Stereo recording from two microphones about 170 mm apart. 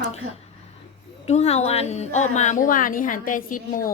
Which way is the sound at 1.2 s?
40° left (ahead or behind).